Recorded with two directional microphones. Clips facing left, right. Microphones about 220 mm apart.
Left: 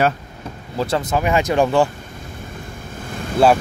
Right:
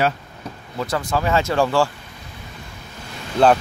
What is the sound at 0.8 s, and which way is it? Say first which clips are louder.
Speech: left 3 dB; 25° left (ahead or behind).